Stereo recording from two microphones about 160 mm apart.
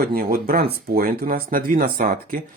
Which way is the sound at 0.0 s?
65° right (ahead or behind).